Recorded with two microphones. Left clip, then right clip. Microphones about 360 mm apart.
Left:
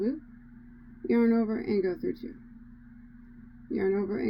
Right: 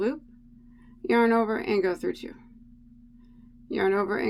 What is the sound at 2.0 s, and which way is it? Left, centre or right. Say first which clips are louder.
Speech: right 3 dB; right.